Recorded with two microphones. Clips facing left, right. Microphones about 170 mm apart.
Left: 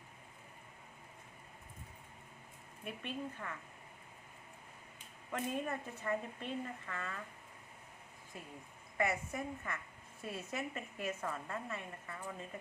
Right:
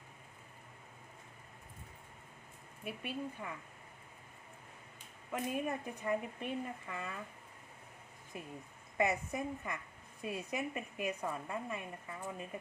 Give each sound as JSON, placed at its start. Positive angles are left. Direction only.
{"t": 2.8, "sound": "a woman's voice", "side_deg": -10}
{"t": 5.3, "sound": "a woman's voice", "side_deg": -10}
{"t": 8.3, "sound": "a woman's voice", "side_deg": -20}